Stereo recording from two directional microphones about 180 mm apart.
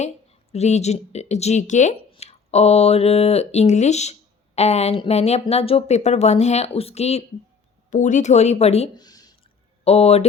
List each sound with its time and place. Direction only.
0.5 s speech: 40° left (ahead or behind)
9.0 s a sound: 20° left (ahead or behind)
9.8 s speech: 35° left (ahead or behind)